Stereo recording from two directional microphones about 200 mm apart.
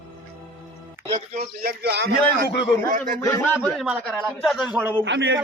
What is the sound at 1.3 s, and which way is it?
Speech, 50° right (ahead or behind).